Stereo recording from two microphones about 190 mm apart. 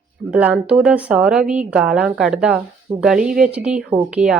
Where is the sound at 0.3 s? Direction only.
5° right (ahead or behind).